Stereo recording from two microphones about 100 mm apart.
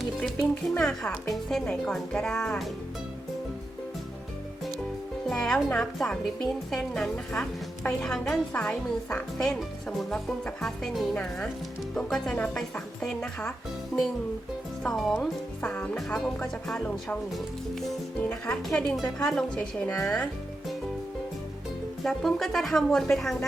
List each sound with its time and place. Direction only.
0.2 s speech: 10° left (ahead or behind)
5.3 s speech: 5° left (ahead or behind)
9.4 s speech: centre (ahead or behind)
14.8 s speech: centre (ahead or behind)
15.7 s speech: 15° left (ahead or behind)
22.0 s speech: 5° left (ahead or behind)